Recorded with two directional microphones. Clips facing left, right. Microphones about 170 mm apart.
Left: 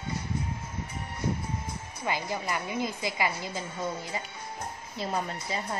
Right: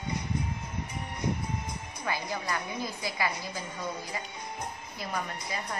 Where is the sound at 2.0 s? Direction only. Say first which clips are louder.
Left 2 dB; 20° left (ahead or behind).